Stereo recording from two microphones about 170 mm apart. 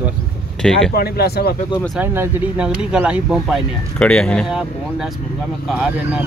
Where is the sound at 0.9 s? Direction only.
70° left (ahead or behind).